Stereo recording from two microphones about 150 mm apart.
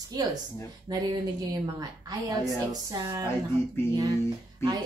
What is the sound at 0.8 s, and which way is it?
Speech, 25° right (ahead or behind).